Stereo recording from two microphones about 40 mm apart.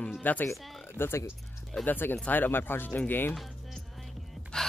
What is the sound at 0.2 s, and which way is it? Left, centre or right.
Speech, left.